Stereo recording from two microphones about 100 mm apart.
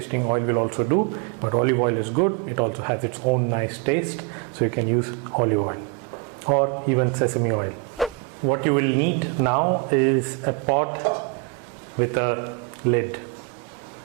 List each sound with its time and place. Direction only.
0.1 s speech: 20° right (ahead or behind)
8.0 s a sound: centre (ahead or behind)
8.4 s speech: 15° right (ahead or behind)